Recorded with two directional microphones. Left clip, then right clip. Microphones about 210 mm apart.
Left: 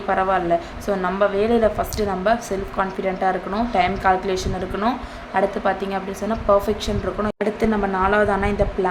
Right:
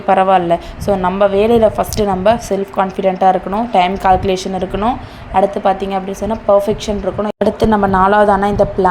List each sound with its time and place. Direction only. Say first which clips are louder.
0.1 s a woman's voice: right 8 dB; 25° right (ahead or behind)